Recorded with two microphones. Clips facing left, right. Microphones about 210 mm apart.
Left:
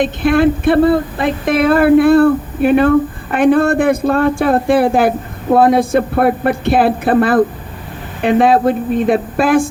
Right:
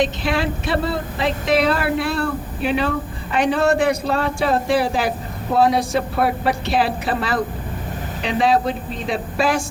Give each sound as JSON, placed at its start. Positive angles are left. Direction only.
{"t": 0.0, "sound": "speech", "side_deg": 55}